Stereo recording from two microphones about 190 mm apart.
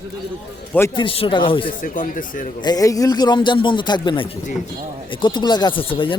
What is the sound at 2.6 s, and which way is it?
Speech, 20° left (ahead or behind).